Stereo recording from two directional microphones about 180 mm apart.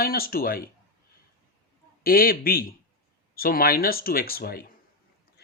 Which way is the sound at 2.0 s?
55° left (ahead or behind).